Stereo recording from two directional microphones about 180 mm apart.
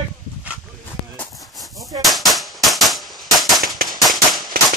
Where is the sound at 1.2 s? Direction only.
Centre (ahead or behind).